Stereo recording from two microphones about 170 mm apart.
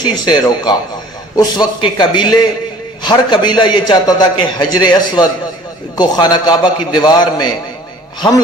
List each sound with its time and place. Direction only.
0.0 s a man's voice: 25° left (ahead or behind)